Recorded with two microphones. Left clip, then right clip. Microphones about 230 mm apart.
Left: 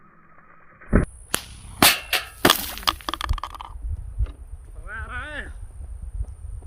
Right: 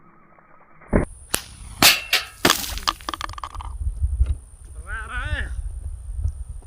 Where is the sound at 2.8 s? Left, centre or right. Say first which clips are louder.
Left 2 dB; left.